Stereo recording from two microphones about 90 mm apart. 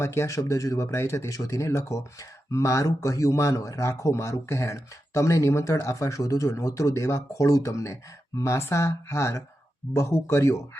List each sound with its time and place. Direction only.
0.0 s speech: 30° left (ahead or behind)